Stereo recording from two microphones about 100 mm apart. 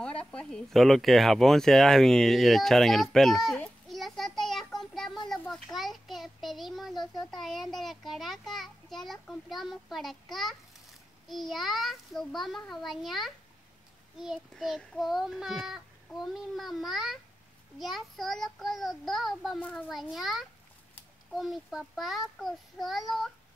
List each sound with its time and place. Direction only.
0.0 s speech: 10° left (ahead or behind)
3.9 s a sound: centre (ahead or behind)
5.5 s speech: centre (ahead or behind)